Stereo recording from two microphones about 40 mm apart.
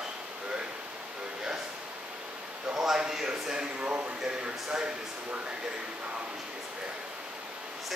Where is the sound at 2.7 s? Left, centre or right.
Centre.